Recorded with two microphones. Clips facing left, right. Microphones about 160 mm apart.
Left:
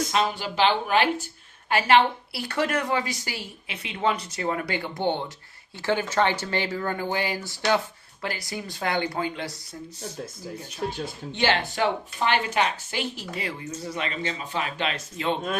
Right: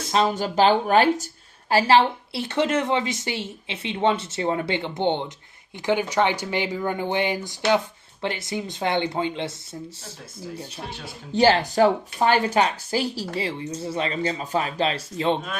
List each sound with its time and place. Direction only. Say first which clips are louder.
0.1 s a woman's voice: right 4 dB; 35° right (ahead or behind)
11.3 s speech: right 7 dB; 40° right (ahead or behind)